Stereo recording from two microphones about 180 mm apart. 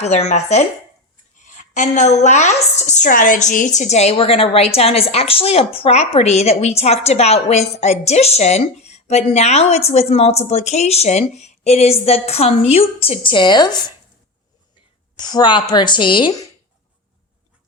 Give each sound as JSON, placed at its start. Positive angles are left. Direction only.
{"t": 0.0, "sound": "a woman's voice", "side_deg": 35}
{"t": 15.2, "sound": "speech", "side_deg": 25}